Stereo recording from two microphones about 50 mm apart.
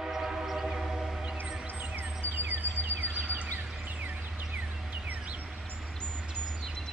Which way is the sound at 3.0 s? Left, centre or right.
Right.